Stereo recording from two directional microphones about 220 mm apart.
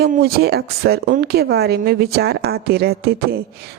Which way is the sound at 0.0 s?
45° right (ahead or behind).